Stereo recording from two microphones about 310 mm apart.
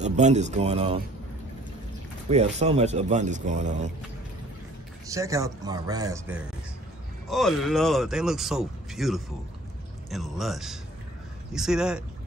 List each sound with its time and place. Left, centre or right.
0.0 s speech: right
2.2 s speech: right
5.0 s speech: centre